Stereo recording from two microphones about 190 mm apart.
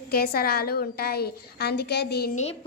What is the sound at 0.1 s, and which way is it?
A woman's voice, 55° left (ahead or behind).